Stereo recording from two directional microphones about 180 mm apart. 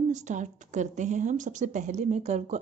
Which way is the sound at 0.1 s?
45° right (ahead or behind).